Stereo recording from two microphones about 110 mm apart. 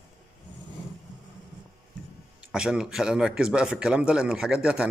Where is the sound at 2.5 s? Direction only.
5° right (ahead or behind).